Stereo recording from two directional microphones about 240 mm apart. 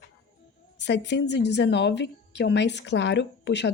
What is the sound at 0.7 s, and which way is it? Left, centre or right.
A woman's voice, left.